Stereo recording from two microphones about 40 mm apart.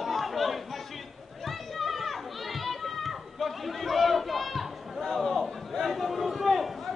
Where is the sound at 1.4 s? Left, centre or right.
Centre.